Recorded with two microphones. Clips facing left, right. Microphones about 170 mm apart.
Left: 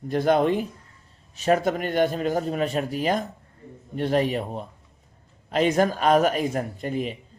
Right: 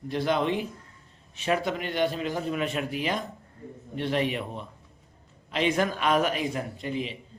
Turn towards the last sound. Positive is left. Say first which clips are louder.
# left 4 dB
turn(degrees=45)  # may be behind; listen again after turning